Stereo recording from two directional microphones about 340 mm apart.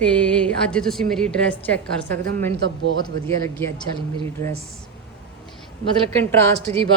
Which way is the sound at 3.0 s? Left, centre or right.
Centre.